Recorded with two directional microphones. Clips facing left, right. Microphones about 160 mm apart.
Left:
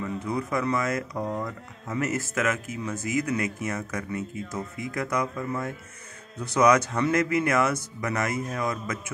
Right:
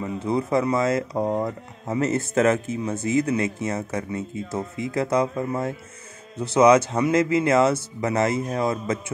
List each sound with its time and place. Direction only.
0.0 s speech: 25° right (ahead or behind)